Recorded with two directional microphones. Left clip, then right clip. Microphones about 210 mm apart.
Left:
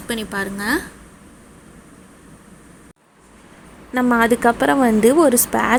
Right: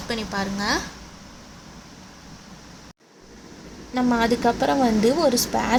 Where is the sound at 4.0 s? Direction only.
15° left (ahead or behind).